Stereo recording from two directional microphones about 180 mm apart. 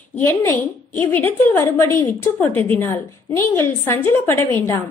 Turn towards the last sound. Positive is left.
turn(degrees=15)  # may be behind; listen again after turning